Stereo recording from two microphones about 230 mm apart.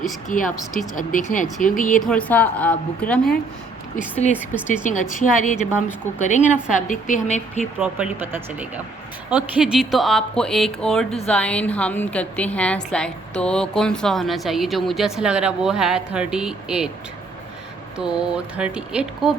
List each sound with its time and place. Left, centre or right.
0.0 s speech: left
2.0 s a woman's voice: centre
4.8 s speech: left
7.8 s a woman's voice: centre
17.9 s a woman's voice: centre